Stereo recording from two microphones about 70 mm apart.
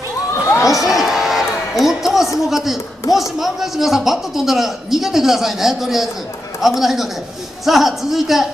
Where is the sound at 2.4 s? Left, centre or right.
Centre.